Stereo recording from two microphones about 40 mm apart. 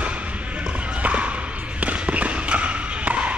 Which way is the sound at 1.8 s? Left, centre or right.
Right.